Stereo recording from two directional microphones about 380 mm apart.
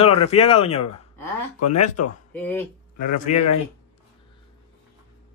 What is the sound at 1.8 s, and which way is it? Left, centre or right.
Speech, left.